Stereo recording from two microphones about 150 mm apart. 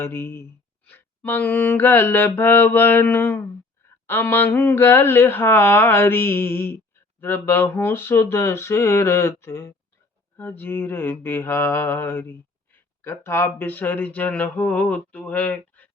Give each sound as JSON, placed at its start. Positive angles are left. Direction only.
{"t": 0.0, "sound": "speech", "side_deg": 15}